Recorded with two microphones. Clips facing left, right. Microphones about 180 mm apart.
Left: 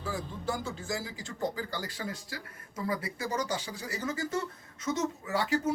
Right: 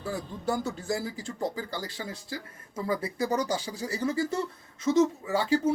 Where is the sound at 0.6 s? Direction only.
35° right (ahead or behind).